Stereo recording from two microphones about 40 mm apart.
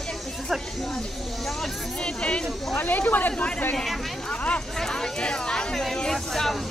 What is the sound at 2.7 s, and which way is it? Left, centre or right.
Speech, left.